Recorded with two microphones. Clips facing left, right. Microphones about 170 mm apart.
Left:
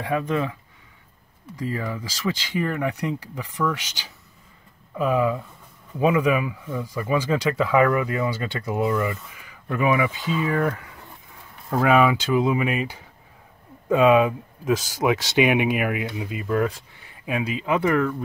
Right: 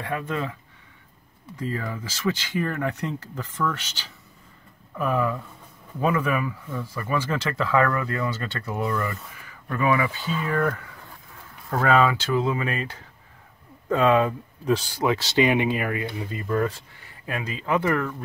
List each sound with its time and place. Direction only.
0.0 s speech: 15° left (ahead or behind)
1.6 s speech: 15° left (ahead or behind)